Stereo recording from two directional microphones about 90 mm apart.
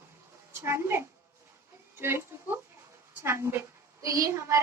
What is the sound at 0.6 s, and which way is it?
A woman's voice, 30° right (ahead or behind).